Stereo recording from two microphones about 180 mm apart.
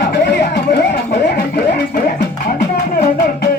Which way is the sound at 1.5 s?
60° left (ahead or behind).